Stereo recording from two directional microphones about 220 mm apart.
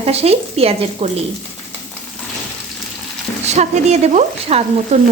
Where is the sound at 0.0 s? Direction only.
30° right (ahead or behind).